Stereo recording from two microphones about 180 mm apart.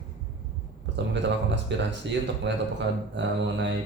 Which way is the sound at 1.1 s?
80° right.